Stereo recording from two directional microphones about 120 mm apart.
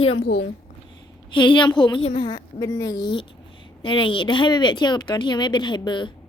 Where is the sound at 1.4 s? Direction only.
40° left (ahead or behind).